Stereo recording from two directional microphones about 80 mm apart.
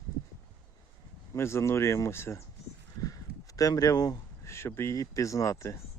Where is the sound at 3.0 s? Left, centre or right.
Left.